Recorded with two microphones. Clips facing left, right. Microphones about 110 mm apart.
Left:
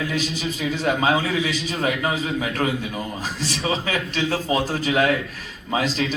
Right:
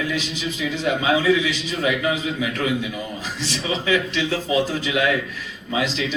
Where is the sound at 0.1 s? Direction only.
45° left (ahead or behind).